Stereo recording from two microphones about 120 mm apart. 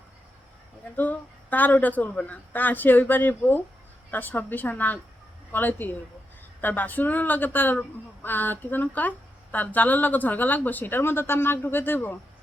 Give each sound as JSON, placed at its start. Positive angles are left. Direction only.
{"t": 0.9, "sound": "a woman's voice", "side_deg": 15}